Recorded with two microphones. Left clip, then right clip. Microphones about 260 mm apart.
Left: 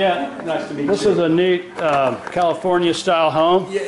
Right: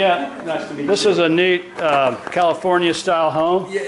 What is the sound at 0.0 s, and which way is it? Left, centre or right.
A man's voice, centre.